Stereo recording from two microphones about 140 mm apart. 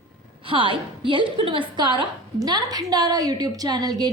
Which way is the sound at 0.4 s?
35° right (ahead or behind).